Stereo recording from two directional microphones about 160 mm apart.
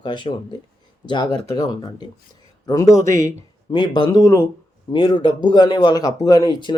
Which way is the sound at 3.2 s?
50° right (ahead or behind).